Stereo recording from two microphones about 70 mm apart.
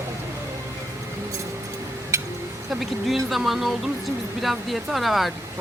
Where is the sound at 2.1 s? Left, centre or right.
Right.